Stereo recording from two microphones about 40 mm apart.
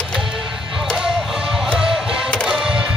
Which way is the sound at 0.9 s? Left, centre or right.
Centre.